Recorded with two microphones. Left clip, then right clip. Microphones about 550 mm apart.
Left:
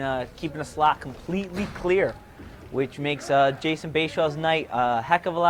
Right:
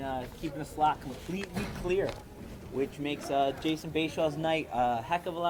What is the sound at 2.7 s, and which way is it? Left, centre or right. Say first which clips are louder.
Speech: left 7 dB; left.